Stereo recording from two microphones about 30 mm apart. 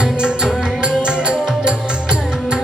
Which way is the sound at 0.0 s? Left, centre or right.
Right.